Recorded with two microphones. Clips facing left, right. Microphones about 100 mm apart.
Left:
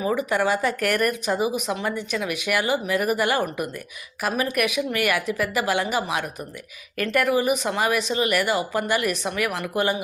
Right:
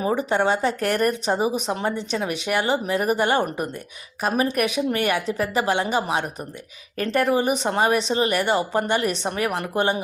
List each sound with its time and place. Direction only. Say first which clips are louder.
0.0 s speech: right 1 dB; 30° right (ahead or behind)